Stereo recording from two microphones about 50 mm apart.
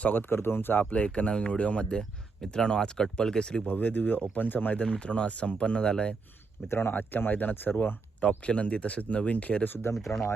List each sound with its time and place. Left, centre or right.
0.0 s speech: left
0.3 s speech: left
0.9 s speech: left
3.7 s speech: left; by 6.1 s centre
6.7 s speech: left
6.9 s speech: left
8.2 s speech: left
10.1 s speech: left